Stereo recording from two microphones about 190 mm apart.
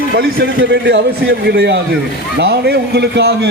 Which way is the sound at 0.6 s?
70° right (ahead or behind).